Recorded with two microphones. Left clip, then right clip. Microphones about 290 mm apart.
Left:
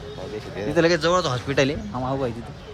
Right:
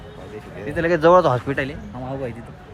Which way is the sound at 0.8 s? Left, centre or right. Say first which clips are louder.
Right 9 dB; centre.